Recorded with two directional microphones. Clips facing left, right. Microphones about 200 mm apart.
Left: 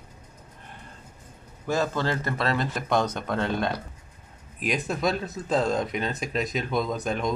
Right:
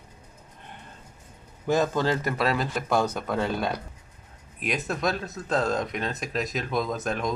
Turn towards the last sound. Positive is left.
turn(degrees=0)  # may be behind; listen again after turning